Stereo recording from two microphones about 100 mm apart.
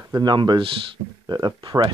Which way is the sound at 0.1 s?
50° right (ahead or behind).